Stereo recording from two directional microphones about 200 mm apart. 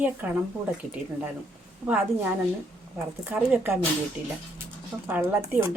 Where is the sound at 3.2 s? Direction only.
10° right (ahead or behind).